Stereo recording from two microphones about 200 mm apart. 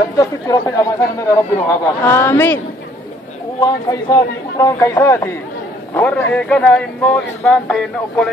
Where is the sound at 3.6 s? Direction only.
20° left (ahead or behind).